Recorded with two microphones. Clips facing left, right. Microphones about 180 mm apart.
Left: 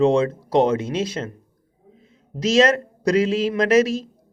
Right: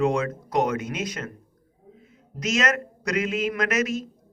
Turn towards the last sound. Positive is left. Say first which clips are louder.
# left 8 dB
turn(degrees=30)  # may be behind; listen again after turning